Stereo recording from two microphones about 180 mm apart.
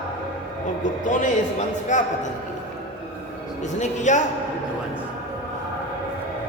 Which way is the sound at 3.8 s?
40° left (ahead or behind).